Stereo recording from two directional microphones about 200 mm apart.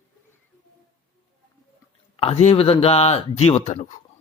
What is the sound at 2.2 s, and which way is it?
Speech, 30° left (ahead or behind).